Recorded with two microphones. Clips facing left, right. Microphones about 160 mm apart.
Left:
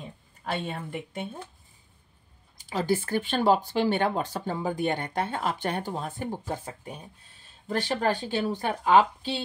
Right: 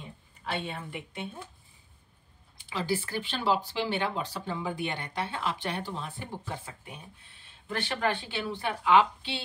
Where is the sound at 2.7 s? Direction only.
45° left (ahead or behind).